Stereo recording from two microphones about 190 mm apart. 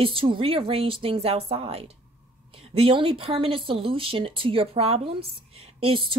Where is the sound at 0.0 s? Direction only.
25° right (ahead or behind).